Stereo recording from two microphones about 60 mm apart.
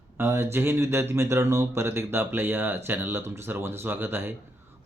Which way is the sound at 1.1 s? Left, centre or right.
Right.